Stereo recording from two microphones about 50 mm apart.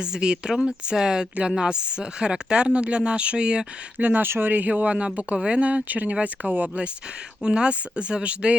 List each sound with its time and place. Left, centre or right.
0.0 s speech: centre
3.9 s speech: right
7.4 s speech: centre